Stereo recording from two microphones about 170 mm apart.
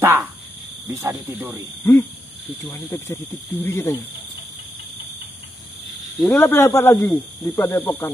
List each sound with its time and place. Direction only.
0.0 s speech: 15° right (ahead or behind)
1.8 s speech: 15° left (ahead or behind)
6.2 s speech: 15° left (ahead or behind)